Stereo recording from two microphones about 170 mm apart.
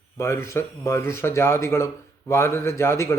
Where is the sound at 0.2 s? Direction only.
15° left (ahead or behind).